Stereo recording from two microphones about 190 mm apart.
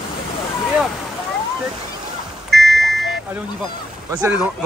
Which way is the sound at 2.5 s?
Centre (ahead or behind).